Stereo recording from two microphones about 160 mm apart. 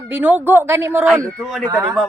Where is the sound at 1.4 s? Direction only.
Centre (ahead or behind).